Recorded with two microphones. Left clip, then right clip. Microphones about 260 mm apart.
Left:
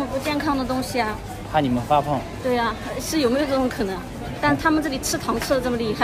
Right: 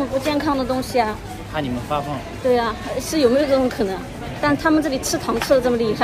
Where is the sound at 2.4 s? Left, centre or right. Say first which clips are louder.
Right 5 dB; centre.